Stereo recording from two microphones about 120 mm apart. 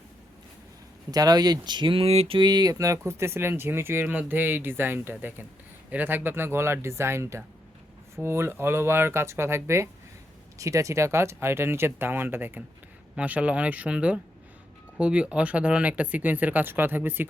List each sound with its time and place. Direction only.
1.1 s speech: 35° right (ahead or behind); by 17.2 s 15° right (ahead or behind)